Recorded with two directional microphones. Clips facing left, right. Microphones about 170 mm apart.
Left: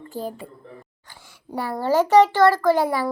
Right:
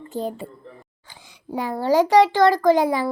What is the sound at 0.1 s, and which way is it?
Speech, 25° right (ahead or behind).